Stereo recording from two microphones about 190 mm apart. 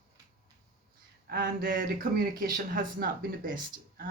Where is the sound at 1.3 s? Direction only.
55° right (ahead or behind).